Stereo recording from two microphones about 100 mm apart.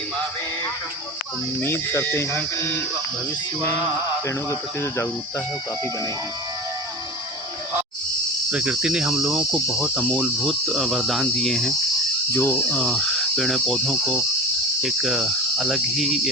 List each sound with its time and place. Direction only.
1.6 s speech: 25° left (ahead or behind)
4.4 s speech: 30° left (ahead or behind)
8.4 s cricket: 10° right (ahead or behind)
12.3 s speech: 20° left (ahead or behind)
12.7 s speech: 5° left (ahead or behind)
14.8 s cricket: 5° right (ahead or behind)